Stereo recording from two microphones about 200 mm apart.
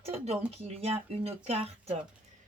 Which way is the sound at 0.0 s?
30° right (ahead or behind).